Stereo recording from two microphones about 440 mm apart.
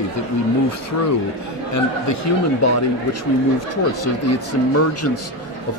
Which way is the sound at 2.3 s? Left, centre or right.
Left.